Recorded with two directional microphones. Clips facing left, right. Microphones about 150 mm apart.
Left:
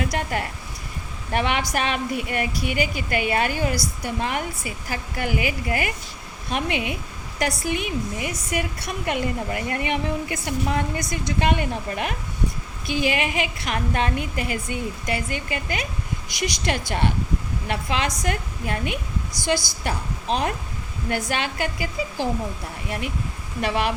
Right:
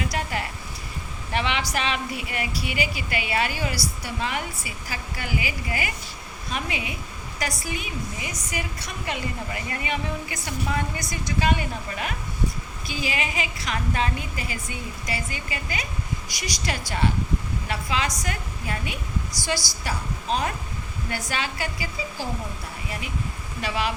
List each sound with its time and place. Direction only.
0.0 s a woman's voice: 50° left (ahead or behind)
21.1 s a woman's voice: 55° left (ahead or behind)
22.9 s a woman's voice: 55° left (ahead or behind)